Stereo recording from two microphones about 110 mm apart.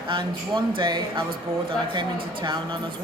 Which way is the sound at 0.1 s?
50° right (ahead or behind).